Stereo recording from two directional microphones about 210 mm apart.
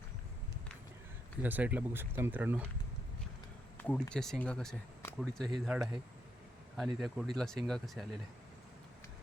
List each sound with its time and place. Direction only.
1.4 s speech: 10° right (ahead or behind)
3.8 s speech: 5° left (ahead or behind)